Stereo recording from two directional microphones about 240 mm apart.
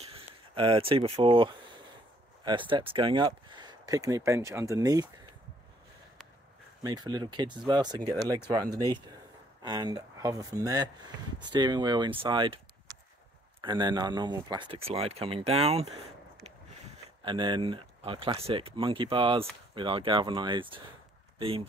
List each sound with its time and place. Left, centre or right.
0.0 s speech: right
6.8 s speech: centre
9.6 s speech: centre
13.6 s speech: centre
17.2 s speech: centre